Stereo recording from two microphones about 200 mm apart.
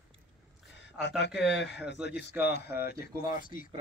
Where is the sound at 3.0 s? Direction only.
45° left (ahead or behind).